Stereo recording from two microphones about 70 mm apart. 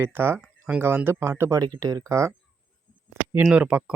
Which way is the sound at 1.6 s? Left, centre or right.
Right.